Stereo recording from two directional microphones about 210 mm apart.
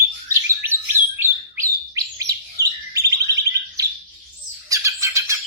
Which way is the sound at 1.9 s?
15° right (ahead or behind).